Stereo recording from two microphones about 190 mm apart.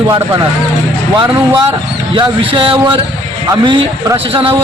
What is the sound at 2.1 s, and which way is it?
A man's voice, 25° right (ahead or behind).